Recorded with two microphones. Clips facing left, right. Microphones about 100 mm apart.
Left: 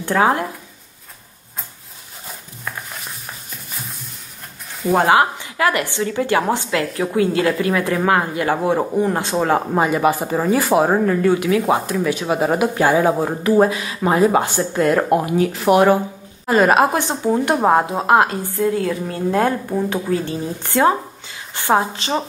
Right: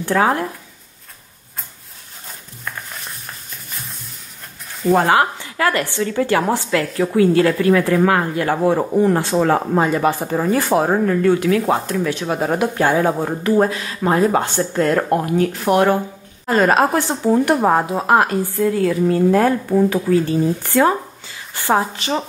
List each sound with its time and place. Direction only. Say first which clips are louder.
0.0 s speech: even; 20° left (ahead or behind)
2.2 s a sound: left 1 dB; 5° left (ahead or behind)
4.9 s speech: left 1 dB; 20° left (ahead or behind)